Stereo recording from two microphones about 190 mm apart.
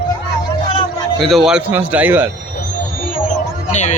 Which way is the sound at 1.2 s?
Centre (ahead or behind).